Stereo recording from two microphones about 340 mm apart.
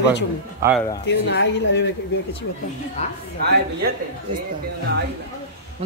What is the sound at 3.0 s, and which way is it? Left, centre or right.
Speech, centre.